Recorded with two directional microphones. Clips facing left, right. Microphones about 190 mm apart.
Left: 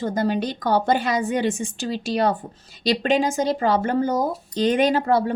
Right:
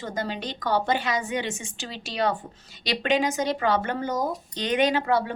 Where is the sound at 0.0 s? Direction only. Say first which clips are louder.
Left 8 dB; 45° left (ahead or behind).